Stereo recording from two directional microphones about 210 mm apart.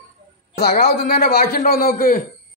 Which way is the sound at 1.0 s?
50° left (ahead or behind).